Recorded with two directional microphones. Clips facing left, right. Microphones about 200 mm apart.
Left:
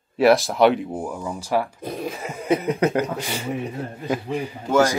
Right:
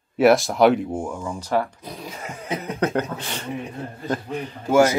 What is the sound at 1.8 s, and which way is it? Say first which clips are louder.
Speech: left 7 dB; 55° left (ahead or behind).